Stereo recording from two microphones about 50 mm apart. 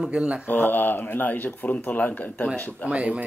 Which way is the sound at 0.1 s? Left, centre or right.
Centre.